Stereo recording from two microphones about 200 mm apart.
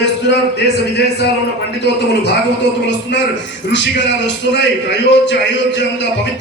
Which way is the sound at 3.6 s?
60° left (ahead or behind).